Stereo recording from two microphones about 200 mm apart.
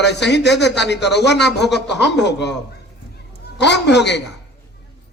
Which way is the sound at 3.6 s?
60° left (ahead or behind).